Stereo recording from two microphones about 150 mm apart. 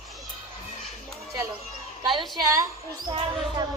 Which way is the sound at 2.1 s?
Centre (ahead or behind).